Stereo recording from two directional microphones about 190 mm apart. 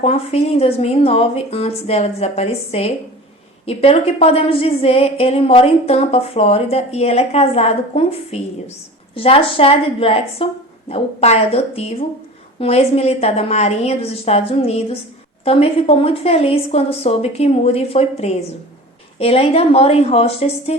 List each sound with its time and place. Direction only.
0.0 s a woman's voice: 30° left (ahead or behind)